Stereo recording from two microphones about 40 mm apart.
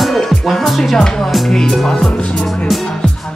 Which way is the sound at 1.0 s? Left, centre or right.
Centre.